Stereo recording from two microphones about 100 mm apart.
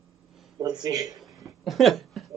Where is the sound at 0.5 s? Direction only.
40° right (ahead or behind).